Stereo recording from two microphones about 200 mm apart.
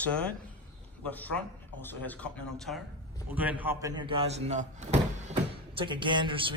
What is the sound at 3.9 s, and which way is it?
Door, 25° right (ahead or behind).